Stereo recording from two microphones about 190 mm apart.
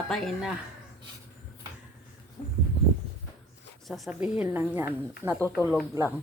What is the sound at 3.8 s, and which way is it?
Speech, centre (ahead or behind).